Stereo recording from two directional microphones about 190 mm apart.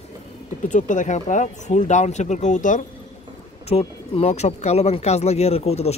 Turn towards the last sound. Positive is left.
turn(degrees=35)  # may be behind; listen again after turning